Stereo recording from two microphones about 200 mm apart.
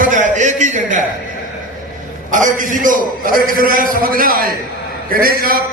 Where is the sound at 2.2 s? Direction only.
40° right (ahead or behind).